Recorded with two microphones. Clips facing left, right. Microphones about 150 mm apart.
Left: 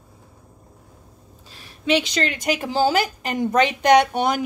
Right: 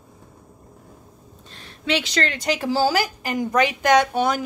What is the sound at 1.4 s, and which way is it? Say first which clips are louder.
Speech: left 3 dB; 10° left (ahead or behind).